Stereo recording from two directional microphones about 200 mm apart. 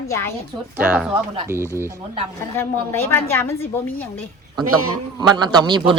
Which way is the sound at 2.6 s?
10° left (ahead or behind).